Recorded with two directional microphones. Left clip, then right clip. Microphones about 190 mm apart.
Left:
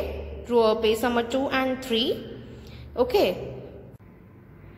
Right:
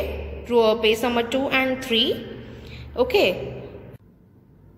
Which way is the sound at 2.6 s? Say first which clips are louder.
Right 2 dB; 10° left (ahead or behind).